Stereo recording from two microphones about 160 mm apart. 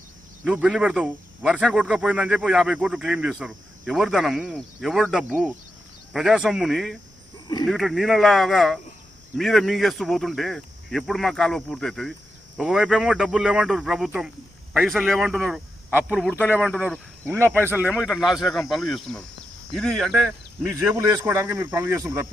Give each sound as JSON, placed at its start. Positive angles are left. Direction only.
{"t": 0.4, "sound": "speech", "side_deg": -5}
{"t": 16.6, "sound": "speech", "side_deg": 0}
{"t": 17.3, "sound": "speech", "side_deg": -15}
{"t": 17.9, "sound": "speech", "side_deg": -5}
{"t": 20.7, "sound": "speech", "side_deg": -15}